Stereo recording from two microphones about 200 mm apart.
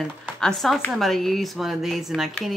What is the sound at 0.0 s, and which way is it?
Speech, centre (ahead or behind).